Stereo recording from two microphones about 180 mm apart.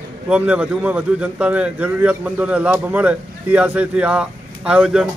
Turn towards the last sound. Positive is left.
turn(degrees=-5)  # may be behind; listen again after turning